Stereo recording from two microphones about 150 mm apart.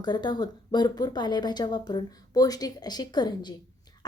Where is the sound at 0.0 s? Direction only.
30° left (ahead or behind).